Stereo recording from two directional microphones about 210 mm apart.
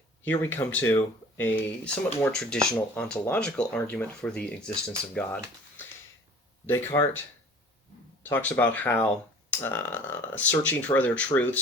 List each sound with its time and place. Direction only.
0.3 s speech: 10° left (ahead or behind)
6.9 s speech: 20° left (ahead or behind)
8.2 s speech: 10° left (ahead or behind)